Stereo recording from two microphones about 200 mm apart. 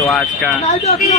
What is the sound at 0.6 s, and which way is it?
Speech, 30° left (ahead or behind).